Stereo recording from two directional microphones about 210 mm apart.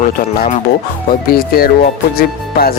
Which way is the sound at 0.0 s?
40° left (ahead or behind).